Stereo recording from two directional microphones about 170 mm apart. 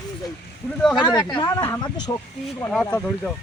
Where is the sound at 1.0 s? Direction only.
25° left (ahead or behind).